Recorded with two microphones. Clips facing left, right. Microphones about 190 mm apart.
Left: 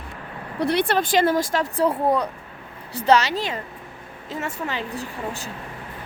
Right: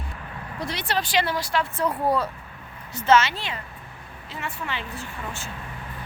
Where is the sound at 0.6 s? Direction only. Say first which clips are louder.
Left 8 dB; 60° left (ahead or behind); by 2.3 s 20° left (ahead or behind).